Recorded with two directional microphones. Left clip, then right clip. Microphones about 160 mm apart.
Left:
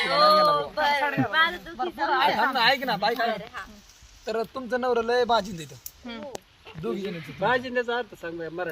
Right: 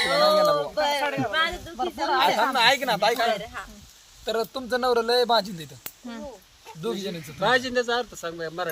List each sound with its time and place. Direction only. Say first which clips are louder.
0.5 s a sound: even; 65° right (ahead or behind); by 2.2 s 90° right
2.3 s a woman's voice: right 1 dB; 90° right
2.6 s a man's voice: right 2 dB; 40° right (ahead or behind)
4.3 s speech: right 2 dB; centre (ahead or behind)
6.8 s speech: right 1 dB; centre (ahead or behind)
7.3 s a man's voice: right 2 dB; 35° left (ahead or behind)